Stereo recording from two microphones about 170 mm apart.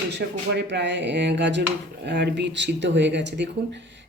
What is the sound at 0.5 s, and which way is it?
Speech, 90° right.